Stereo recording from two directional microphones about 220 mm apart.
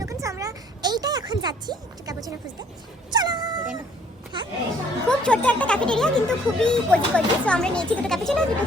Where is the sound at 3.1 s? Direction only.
20° right (ahead or behind).